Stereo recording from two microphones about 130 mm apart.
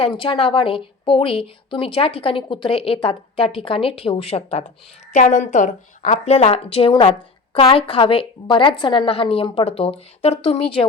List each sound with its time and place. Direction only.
0.0 s a woman's voice: 40° left (ahead or behind)
5.1 s a woman's voice: 70° left (ahead or behind); by 10.8 s 50° left (ahead or behind)